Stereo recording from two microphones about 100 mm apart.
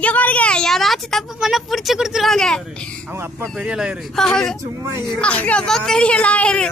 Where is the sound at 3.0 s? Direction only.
25° right (ahead or behind).